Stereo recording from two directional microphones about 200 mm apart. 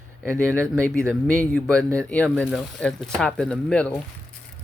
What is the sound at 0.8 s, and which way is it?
Speech, 5° left (ahead or behind).